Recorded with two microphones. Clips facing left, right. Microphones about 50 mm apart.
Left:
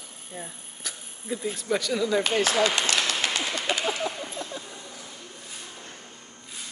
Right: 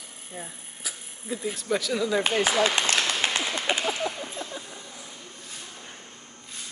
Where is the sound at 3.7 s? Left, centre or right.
Right.